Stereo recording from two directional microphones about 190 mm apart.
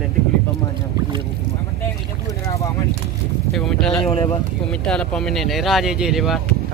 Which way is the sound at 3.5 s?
Centre (ahead or behind).